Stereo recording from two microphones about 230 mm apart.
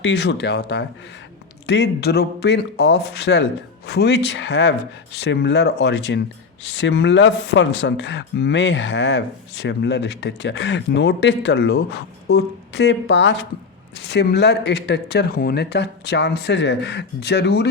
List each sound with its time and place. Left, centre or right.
0.0 s speech: left